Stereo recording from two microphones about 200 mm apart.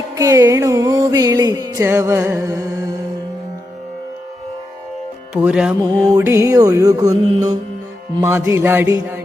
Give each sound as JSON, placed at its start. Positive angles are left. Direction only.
{"t": 0.2, "sound": "music", "side_deg": -15}
{"t": 5.3, "sound": "music", "side_deg": -5}